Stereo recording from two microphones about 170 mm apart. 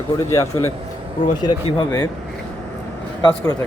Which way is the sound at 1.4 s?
30° left (ahead or behind).